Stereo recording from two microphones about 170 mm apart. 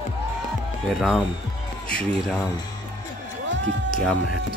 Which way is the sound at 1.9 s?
Centre (ahead or behind).